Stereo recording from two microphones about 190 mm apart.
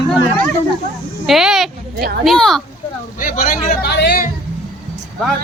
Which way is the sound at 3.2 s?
45° left (ahead or behind).